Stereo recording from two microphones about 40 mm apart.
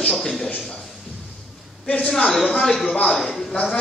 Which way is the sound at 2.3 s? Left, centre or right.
Centre.